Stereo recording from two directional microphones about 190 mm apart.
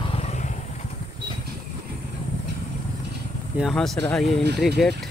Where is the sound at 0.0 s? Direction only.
30° left (ahead or behind).